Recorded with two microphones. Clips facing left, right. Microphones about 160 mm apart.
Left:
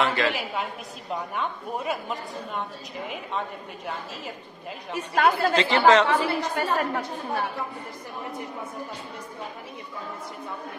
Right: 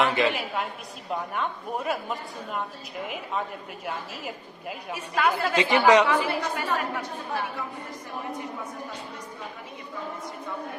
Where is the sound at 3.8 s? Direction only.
10° right (ahead or behind).